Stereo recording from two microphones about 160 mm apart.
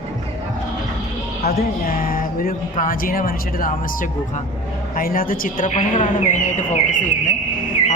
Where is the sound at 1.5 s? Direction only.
70° left (ahead or behind).